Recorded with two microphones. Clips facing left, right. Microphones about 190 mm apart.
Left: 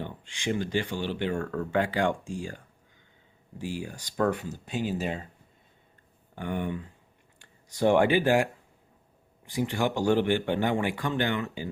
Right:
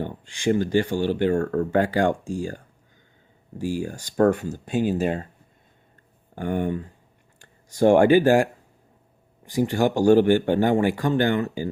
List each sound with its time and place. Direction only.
0.0 s speech: 45° right (ahead or behind)
3.6 s speech: 45° right (ahead or behind)
6.3 s speech: 45° right (ahead or behind)
9.5 s speech: 40° right (ahead or behind)